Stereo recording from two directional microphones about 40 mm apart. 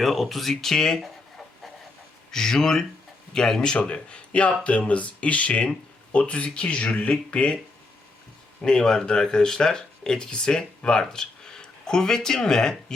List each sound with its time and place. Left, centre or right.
0.0 s speech: centre
1.0 s chicken: centre
2.3 s speech: centre
8.6 s speech: centre